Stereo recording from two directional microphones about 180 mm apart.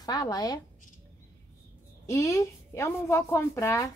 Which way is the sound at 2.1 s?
15° left (ahead or behind).